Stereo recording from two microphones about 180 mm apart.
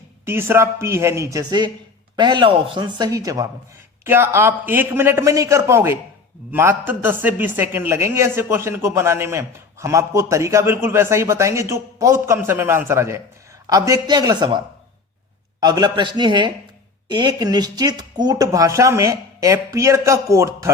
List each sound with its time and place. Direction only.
0.3 s speech: 15° right (ahead or behind)
15.6 s speech: 20° right (ahead or behind)